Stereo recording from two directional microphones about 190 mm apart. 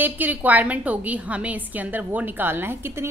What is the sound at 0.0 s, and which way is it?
A woman's voice, 10° right (ahead or behind).